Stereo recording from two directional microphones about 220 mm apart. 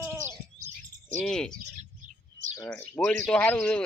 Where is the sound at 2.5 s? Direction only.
15° left (ahead or behind).